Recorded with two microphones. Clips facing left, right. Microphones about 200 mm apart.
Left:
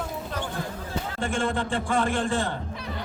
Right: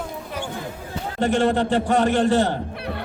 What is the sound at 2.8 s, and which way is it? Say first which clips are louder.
Music: right 5 dB; 60° right (ahead or behind).